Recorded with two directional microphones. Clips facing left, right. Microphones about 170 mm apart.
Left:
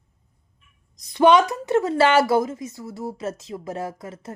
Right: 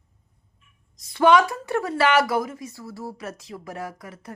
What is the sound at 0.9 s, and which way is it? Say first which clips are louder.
A woman's voice: left 2 dB; 20° left (ahead or behind).